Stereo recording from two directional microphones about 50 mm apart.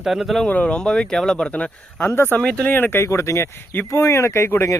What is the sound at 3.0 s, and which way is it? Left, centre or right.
Speech, left.